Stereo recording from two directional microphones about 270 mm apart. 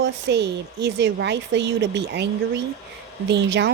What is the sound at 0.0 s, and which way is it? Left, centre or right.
A woman's voice, right.